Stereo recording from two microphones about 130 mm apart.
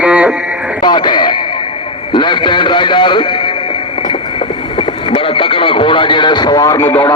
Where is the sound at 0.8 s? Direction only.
35° left (ahead or behind).